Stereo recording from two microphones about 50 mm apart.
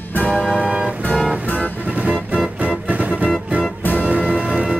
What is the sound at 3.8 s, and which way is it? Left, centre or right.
Music, left.